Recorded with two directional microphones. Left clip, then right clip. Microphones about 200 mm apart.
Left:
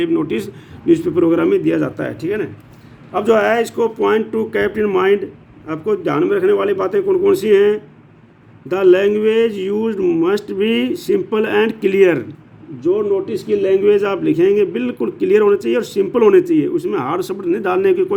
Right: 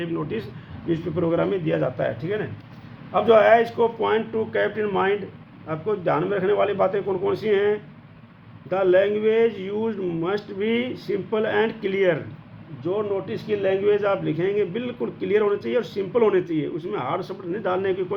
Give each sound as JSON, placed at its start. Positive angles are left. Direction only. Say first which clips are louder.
{"t": 0.0, "sound": "a man's voice", "louder": "left 10 dB", "side_deg": 45}
{"t": 13.6, "sound": "a man's voice", "louder": "left 7 dB", "side_deg": 45}